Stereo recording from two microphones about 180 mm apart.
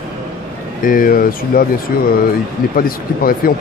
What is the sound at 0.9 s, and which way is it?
Speech, 50° left (ahead or behind).